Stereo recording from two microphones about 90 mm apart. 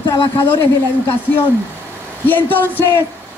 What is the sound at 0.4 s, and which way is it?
Speech, 25° left (ahead or behind).